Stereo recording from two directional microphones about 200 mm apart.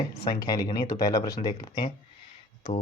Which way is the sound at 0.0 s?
20° left (ahead or behind).